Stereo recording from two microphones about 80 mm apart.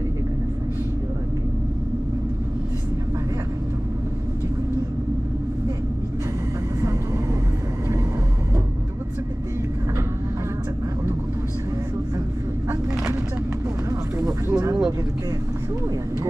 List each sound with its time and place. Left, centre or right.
13.8 s vehicle: right